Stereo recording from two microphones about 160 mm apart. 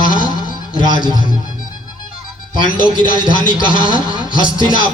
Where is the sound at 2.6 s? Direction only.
30° right (ahead or behind).